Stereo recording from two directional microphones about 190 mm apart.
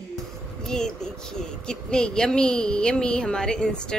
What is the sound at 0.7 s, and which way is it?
A woman's voice, 5° left (ahead or behind).